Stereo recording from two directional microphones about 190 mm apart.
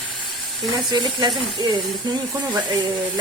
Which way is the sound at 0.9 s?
25° right (ahead or behind).